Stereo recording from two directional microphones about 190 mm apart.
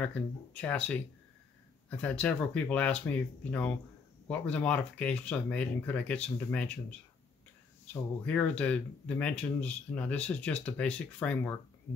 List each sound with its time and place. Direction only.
0.0 s speech: 5° left (ahead or behind)
4.3 s speech: 5° left (ahead or behind)
7.9 s speech: 5° left (ahead or behind)